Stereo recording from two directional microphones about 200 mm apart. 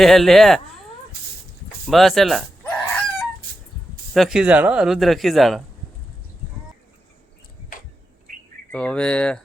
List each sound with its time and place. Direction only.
0.0 s speech: centre (ahead or behind)
1.9 s fowl: centre (ahead or behind)
4.1 s speech: centre (ahead or behind)
8.7 s speech: 5° left (ahead or behind)